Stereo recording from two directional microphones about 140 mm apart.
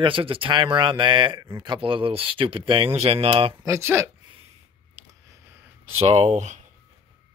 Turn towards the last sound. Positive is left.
turn(degrees=-60)  # may be behind; listen again after turning